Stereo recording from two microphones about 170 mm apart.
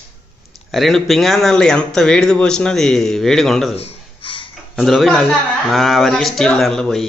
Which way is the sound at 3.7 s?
35° left (ahead or behind).